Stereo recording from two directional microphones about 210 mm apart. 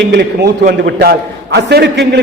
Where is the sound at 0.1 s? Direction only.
50° right (ahead or behind).